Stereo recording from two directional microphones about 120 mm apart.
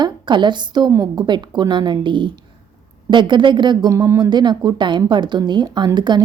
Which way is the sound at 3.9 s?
25° right (ahead or behind).